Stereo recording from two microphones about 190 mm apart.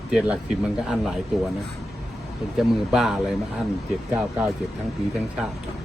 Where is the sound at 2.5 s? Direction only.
Centre (ahead or behind).